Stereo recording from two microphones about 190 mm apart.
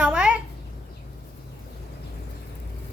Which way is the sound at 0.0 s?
5° right (ahead or behind).